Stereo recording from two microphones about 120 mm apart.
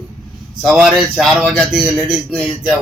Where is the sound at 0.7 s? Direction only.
Centre (ahead or behind).